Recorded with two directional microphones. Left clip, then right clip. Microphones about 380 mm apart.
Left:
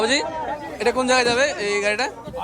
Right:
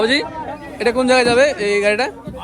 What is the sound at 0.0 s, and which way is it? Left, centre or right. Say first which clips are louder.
A man's voice: right 3 dB; centre.